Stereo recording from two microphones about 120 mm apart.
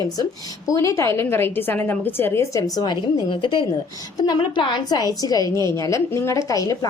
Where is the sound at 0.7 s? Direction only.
25° left (ahead or behind).